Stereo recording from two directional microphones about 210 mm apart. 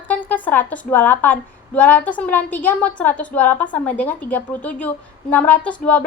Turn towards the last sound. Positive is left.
turn(degrees=5)  # may be behind; listen again after turning